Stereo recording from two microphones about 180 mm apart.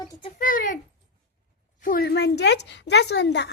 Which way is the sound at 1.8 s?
55° left (ahead or behind).